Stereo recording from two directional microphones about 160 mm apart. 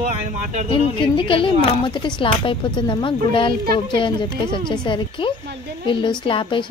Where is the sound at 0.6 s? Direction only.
30° left (ahead or behind).